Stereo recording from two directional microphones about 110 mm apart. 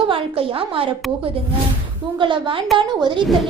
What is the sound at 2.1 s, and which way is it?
A woman's voice, 50° right (ahead or behind).